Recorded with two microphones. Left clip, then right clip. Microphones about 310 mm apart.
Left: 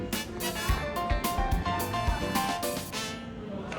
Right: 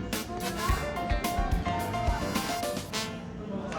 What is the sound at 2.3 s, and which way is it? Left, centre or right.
Music, centre.